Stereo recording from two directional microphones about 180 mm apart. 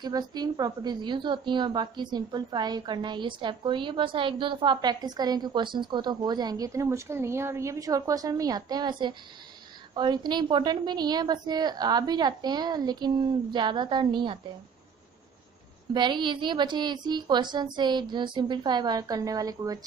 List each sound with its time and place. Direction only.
0.0 s a woman's voice: 20° right (ahead or behind)
15.9 s a woman's voice: 25° right (ahead or behind)